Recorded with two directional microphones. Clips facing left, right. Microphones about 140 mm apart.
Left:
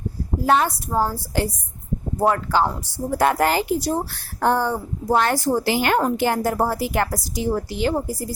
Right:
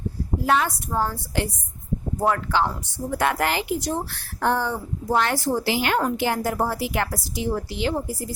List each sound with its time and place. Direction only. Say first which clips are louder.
0.4 s a woman's voice: left 3 dB; 35° left (ahead or behind)